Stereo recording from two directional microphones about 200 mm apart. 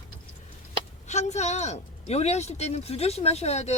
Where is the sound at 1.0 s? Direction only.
35° left (ahead or behind).